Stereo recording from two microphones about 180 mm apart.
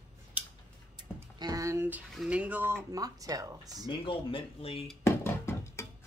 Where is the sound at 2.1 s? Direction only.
5° right (ahead or behind); by 3.8 s 20° right (ahead or behind).